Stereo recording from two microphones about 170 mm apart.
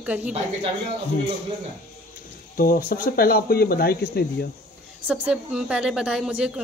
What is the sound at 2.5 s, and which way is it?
Speech, 55° left (ahead or behind).